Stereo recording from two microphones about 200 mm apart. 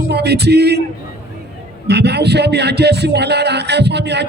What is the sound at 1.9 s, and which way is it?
A man's voice, 55° right (ahead or behind).